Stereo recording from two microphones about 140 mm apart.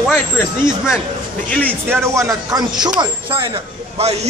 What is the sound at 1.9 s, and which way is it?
Speech, 20° right (ahead or behind).